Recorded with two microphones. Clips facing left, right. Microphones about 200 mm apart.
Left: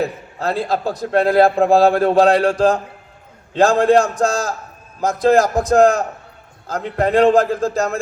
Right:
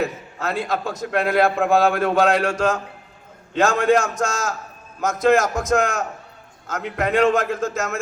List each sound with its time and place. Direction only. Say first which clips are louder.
0.0 s a man's voice: left 3 dB; 35° left (ahead or behind)